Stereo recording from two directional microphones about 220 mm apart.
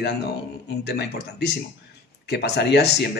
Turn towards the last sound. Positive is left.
turn(degrees=50)  # may be behind; listen again after turning